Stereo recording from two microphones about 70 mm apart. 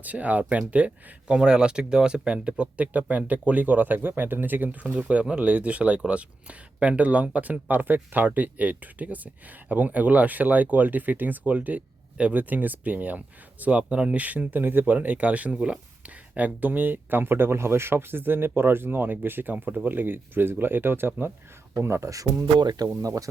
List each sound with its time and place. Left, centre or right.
0.0 s speech: right
22.5 s speech: right
22.9 s speech: right